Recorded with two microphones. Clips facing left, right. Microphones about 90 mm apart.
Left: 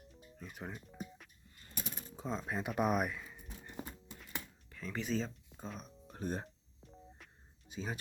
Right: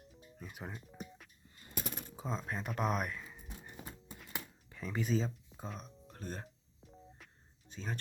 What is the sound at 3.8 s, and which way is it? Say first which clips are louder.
Clip-clop: even; centre (ahead or behind).